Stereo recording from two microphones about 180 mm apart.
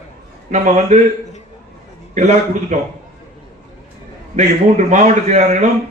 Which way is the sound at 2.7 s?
40° right (ahead or behind).